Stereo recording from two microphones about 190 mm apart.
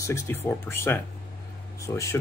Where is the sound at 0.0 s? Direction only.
15° left (ahead or behind).